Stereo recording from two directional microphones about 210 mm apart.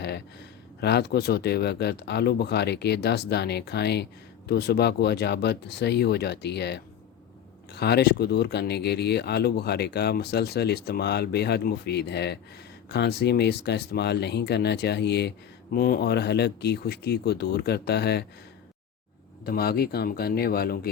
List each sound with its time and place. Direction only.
0.8 s speech: 50° left (ahead or behind)
19.5 s speech: 45° left (ahead or behind)